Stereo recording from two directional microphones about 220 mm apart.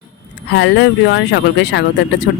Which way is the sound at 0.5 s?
55° left (ahead or behind).